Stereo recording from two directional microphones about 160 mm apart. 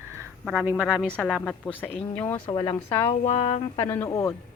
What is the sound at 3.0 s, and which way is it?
Music, 35° left (ahead or behind).